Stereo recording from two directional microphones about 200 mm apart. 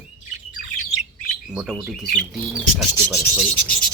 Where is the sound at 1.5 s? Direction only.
5° right (ahead or behind).